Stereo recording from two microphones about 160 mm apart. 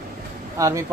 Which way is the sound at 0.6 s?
20° right (ahead or behind).